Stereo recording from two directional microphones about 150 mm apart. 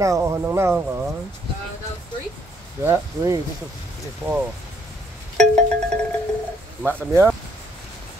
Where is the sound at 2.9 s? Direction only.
20° right (ahead or behind).